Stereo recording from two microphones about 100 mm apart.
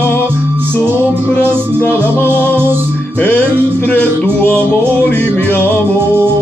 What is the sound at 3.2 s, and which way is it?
Music, 15° left (ahead or behind).